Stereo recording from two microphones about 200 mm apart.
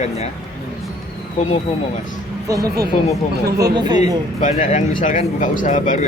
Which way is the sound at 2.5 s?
15° right (ahead or behind).